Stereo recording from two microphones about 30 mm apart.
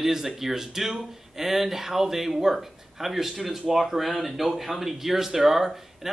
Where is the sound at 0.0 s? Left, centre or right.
Centre.